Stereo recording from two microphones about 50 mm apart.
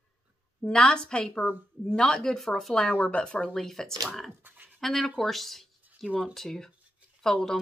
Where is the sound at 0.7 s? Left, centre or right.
Centre.